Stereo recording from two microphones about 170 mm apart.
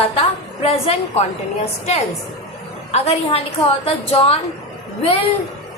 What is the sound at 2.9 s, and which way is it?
A woman's voice, 35° left (ahead or behind).